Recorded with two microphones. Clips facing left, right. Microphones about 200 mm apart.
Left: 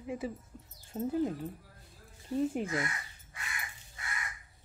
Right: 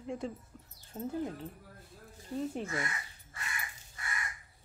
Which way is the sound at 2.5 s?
10° left (ahead or behind).